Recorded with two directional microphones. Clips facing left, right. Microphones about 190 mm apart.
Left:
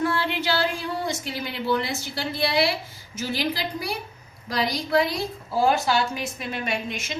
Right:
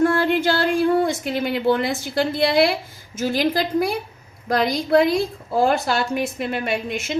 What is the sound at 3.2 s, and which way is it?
A woman's voice, 50° right (ahead or behind).